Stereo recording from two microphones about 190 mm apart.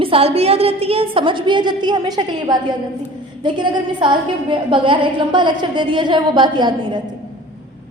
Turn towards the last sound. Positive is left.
turn(degrees=-25)  # may be behind; listen again after turning